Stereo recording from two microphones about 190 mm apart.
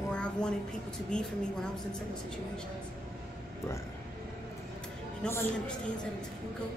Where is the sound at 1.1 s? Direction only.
5° left (ahead or behind).